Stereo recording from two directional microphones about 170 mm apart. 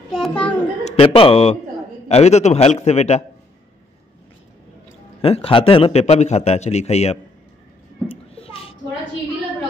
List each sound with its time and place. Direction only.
0.1 s a child's voice: 5° left (ahead or behind)
0.8 s a man's voice: 35° left (ahead or behind)
5.2 s a man's voice: 35° left (ahead or behind)
8.1 s a sound: 35° left (ahead or behind)